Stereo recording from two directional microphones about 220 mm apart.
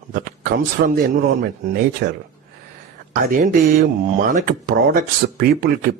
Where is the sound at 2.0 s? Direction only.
50° right (ahead or behind).